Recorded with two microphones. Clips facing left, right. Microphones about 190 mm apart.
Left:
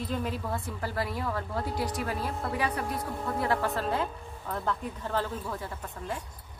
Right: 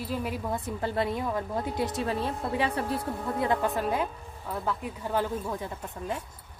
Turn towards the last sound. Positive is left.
turn(degrees=-20)  # may be behind; listen again after turning